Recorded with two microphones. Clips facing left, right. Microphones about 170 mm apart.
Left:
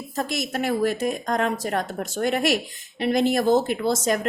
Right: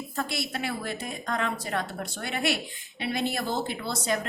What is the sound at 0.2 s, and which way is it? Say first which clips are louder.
Speech: left 6 dB; 45° left (ahead or behind).